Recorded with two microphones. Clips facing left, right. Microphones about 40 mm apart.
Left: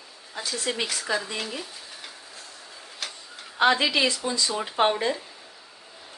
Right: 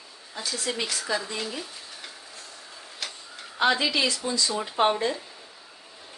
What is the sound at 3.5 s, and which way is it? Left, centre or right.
A woman's voice, left.